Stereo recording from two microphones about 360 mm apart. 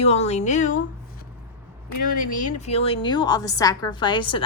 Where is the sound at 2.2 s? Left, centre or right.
Left.